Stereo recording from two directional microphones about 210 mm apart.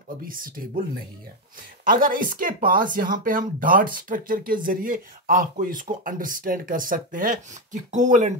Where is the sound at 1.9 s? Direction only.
40° right (ahead or behind).